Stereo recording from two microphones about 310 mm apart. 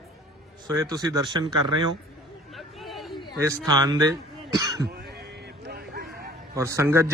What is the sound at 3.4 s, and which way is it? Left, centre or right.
A man's voice, centre.